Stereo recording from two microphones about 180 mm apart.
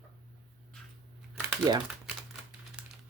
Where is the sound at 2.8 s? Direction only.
5° right (ahead or behind).